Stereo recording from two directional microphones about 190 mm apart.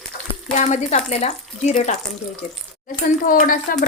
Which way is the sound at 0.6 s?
35° left (ahead or behind).